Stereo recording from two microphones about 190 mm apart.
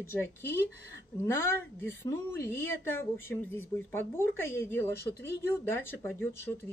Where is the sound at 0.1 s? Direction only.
10° left (ahead or behind).